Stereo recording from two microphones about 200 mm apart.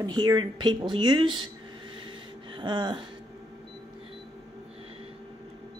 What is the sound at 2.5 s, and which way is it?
Speech, 25° right (ahead or behind).